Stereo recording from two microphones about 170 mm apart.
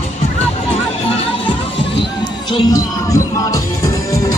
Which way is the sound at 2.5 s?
20° left (ahead or behind).